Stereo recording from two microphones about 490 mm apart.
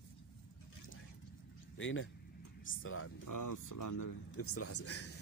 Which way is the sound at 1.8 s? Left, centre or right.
Left.